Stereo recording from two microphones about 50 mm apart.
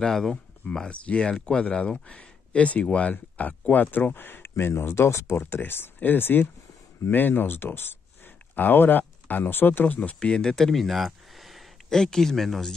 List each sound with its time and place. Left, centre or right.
0.0 s speech: centre
0.7 s speech: left
5.4 s speech: left
9.8 s speech: left
10.1 s speech: centre
11.9 s speech: centre